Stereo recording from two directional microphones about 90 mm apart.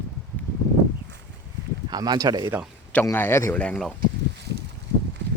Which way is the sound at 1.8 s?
50° right (ahead or behind).